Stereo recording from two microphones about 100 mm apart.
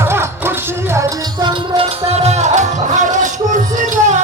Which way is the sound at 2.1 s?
90° right.